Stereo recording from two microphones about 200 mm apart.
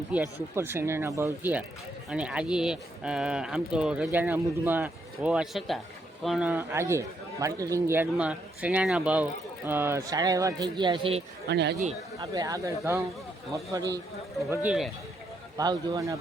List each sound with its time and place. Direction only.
0.1 s a man's voice: 10° right (ahead or behind); by 11.2 s 25° right (ahead or behind)
11.4 s speech: 55° right (ahead or behind)
12.2 s a man's voice: 20° right (ahead or behind)
15.5 s a man's voice: 20° right (ahead or behind)